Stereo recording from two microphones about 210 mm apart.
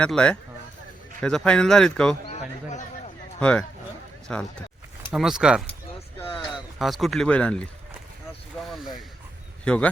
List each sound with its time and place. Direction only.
0.0 s speech: 5° left (ahead or behind)
2.2 s speech: 30° left (ahead or behind)
3.4 s speech: 5° left (ahead or behind)
8.6 s a sound: centre (ahead or behind)
9.6 s speech: 5° left (ahead or behind)